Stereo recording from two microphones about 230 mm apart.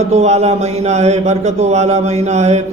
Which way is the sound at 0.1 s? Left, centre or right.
Right.